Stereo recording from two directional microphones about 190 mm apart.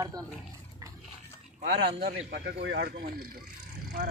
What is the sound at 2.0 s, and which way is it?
Speech, 55° right (ahead or behind).